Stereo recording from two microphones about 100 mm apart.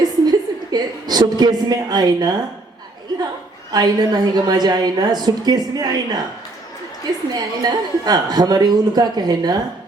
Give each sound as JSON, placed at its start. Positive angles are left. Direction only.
{"t": 0.0, "sound": "a sound", "side_deg": -45}
{"t": 3.7, "sound": "a woman's voice", "side_deg": -45}
{"t": 7.3, "sound": "a woman's voice", "side_deg": -40}